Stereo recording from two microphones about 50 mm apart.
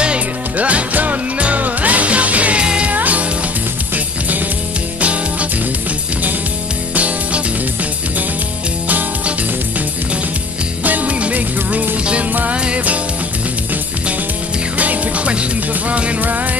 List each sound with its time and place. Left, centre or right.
0.0 s music: right
2.6 s music: centre
2.9 s music: right
8.8 s music: right
10.8 s music: right
14.8 s music: right